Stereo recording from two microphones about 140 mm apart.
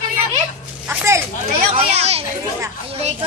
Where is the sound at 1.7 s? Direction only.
50° right (ahead or behind).